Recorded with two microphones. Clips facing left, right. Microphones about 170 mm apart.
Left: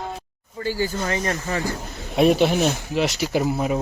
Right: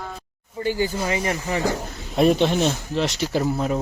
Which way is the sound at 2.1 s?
5° left (ahead or behind).